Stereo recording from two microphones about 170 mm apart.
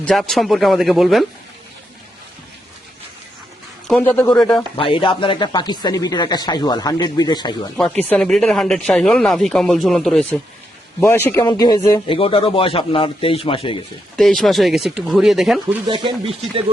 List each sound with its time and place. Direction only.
0.0 s speech: centre (ahead or behind)
4.0 s speech: 10° left (ahead or behind)
4.8 s speech: 30° left (ahead or behind)
8.1 s speech: 5° left (ahead or behind); by 12.0 s 20° left (ahead or behind)
12.0 s speech: 30° left (ahead or behind)
14.2 s speech: centre (ahead or behind)
15.9 s speech: 30° right (ahead or behind)